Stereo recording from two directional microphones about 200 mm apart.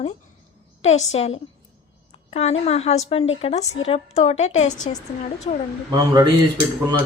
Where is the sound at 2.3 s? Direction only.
30° left (ahead or behind).